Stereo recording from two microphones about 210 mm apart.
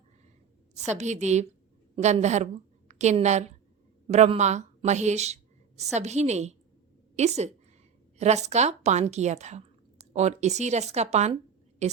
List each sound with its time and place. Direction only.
0.7 s a woman's voice: 35° right (ahead or behind)